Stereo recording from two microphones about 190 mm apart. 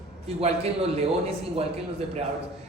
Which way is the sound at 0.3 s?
30° right (ahead or behind).